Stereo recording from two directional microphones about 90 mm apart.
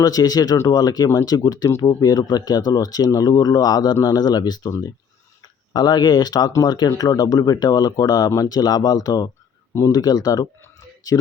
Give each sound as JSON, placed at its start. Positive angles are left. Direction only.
{"t": 0.0, "sound": "speech", "side_deg": 45}
{"t": 5.7, "sound": "speech", "side_deg": 50}